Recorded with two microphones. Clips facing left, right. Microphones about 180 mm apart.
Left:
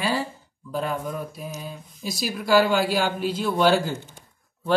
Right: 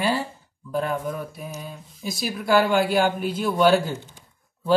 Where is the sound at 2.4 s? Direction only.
55° right (ahead or behind).